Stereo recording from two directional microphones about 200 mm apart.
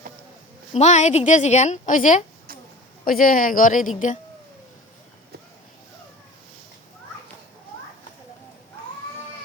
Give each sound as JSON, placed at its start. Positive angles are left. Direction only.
{"t": 0.7, "sound": "a woman's voice", "side_deg": 35}